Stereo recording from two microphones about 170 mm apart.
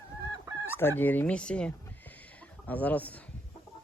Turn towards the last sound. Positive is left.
turn(degrees=10)  # may be behind; listen again after turning